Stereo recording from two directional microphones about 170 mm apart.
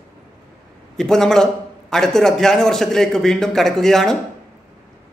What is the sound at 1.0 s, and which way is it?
A man's voice, 5° left (ahead or behind).